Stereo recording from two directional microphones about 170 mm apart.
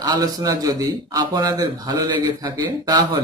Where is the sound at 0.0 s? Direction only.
20° right (ahead or behind).